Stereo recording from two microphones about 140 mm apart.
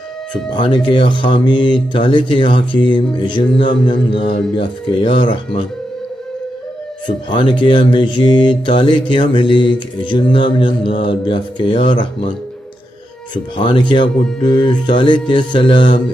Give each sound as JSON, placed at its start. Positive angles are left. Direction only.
{"t": 0.6, "sound": "speech", "side_deg": 40}
{"t": 7.1, "sound": "speech", "side_deg": 35}
{"t": 13.3, "sound": "speech", "side_deg": 35}